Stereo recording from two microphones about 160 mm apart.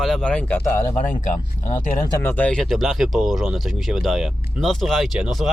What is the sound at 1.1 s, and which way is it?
Speech, 50° left (ahead or behind).